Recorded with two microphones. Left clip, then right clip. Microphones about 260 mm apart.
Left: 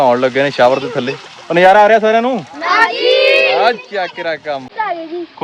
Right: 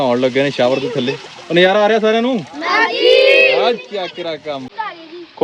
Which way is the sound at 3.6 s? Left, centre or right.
Centre.